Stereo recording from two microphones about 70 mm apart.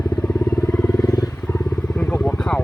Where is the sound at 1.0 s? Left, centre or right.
Left.